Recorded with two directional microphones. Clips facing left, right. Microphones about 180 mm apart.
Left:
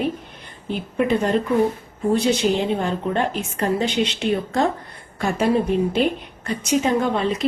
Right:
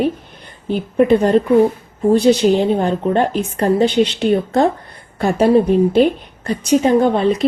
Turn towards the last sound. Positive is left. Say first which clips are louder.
# right 7 dB
turn(degrees=-35)  # may be behind; listen again after turning